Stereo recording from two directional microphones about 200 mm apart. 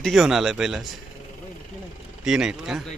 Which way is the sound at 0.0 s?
Centre (ahead or behind).